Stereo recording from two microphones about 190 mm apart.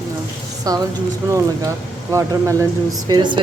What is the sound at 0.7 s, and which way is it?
Speech, 20° right (ahead or behind).